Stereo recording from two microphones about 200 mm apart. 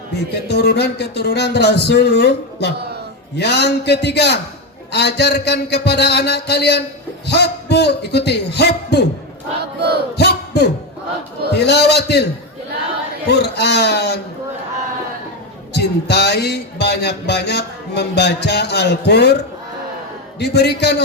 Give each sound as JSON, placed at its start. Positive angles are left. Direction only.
{"t": 0.1, "sound": "music", "side_deg": 55}
{"t": 10.2, "sound": "a sound", "side_deg": 55}
{"t": 11.5, "sound": "music", "side_deg": 55}
{"t": 13.3, "sound": "music", "side_deg": 55}
{"t": 15.7, "sound": "music", "side_deg": 55}
{"t": 20.4, "sound": "music", "side_deg": 55}